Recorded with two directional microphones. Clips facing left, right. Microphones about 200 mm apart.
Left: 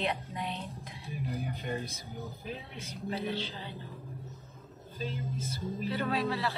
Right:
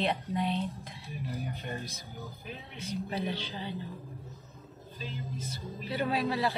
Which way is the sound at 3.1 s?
15° right (ahead or behind).